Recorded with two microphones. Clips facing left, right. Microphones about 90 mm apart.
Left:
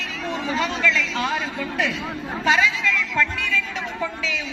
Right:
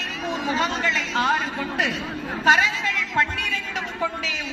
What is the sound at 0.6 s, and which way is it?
A woman's voice, 40° right (ahead or behind).